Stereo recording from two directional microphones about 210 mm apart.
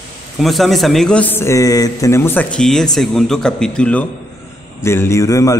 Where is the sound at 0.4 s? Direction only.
Centre (ahead or behind).